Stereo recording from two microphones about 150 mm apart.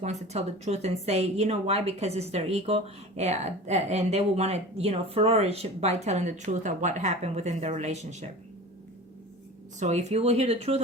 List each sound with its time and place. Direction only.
0.0 s speech: 50° right (ahead or behind)
9.8 s speech: 50° right (ahead or behind)